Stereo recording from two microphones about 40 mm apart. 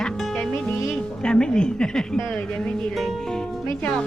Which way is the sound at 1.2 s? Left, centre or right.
Left.